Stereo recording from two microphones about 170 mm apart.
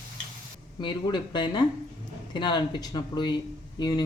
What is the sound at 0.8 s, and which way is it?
Speech, 30° left (ahead or behind).